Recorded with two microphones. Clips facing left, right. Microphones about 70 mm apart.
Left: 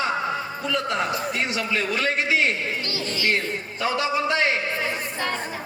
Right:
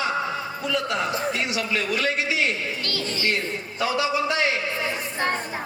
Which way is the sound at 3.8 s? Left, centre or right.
Left.